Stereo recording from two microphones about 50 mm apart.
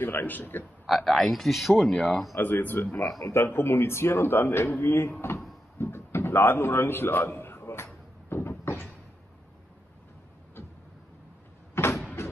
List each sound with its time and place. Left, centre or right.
0.0 s a man's voice: left
0.8 s a man's voice: centre
2.3 s speech: left
3.2 s a man's voice: left
3.4 s speech: left
5.8 s a sound: left
11.7 s door: left